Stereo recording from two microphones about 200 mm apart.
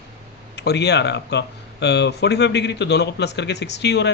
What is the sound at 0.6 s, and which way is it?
Speech, 55° left (ahead or behind).